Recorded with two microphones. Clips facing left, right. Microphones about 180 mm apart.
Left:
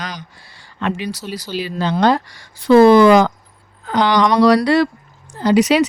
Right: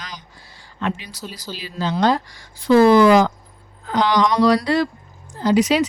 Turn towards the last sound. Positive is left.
turn(degrees=75)  # may be behind; listen again after turning